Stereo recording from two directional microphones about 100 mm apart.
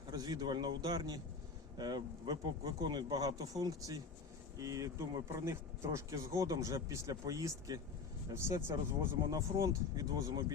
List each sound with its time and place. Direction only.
0.1 s speech: 45° right (ahead or behind); by 9.0 s 25° right (ahead or behind)
9.3 s speech: 40° right (ahead or behind)